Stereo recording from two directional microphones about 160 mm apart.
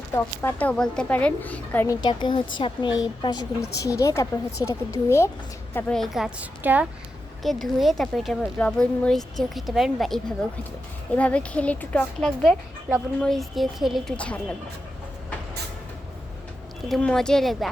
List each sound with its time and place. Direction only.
0.1 s a woman's voice: 10° left (ahead or behind)
2.0 s a woman's voice: 30° left (ahead or behind)
3.8 s a woman's voice: 20° left (ahead or behind)
5.7 s a woman's voice: 5° left (ahead or behind)
7.4 s a woman's voice: centre (ahead or behind)
16.9 s a woman's voice: 5° left (ahead or behind)